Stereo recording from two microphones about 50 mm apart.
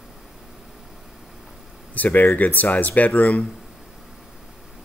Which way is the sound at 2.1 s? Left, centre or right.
Left.